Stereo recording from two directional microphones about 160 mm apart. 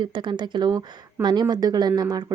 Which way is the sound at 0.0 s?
30° right (ahead or behind).